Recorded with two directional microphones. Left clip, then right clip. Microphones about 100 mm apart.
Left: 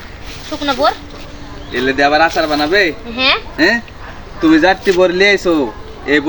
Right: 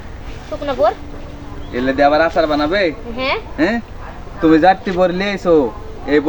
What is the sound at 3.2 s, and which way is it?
Speech, 30° left (ahead or behind).